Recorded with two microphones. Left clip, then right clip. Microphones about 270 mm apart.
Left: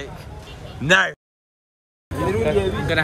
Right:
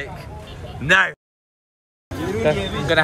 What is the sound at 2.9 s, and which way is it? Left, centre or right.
Speech, centre.